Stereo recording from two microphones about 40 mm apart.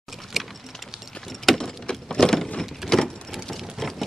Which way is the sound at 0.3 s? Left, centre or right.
Centre.